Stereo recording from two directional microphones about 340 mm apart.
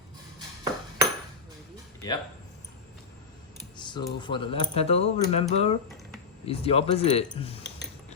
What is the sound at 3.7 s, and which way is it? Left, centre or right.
Speech, centre.